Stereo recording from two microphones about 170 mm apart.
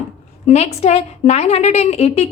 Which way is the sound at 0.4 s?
40° left (ahead or behind).